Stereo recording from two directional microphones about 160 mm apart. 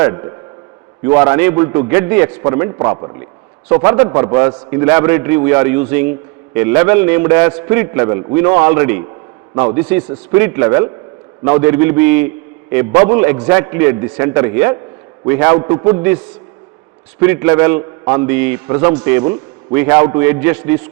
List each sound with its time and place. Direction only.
0.0 s a man's voice: 20° right (ahead or behind)
3.7 s a man's voice: 15° right (ahead or behind)
17.2 s a man's voice: 15° right (ahead or behind)